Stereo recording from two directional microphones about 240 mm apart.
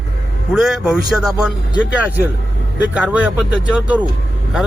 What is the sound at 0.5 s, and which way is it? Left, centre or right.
Speech, centre.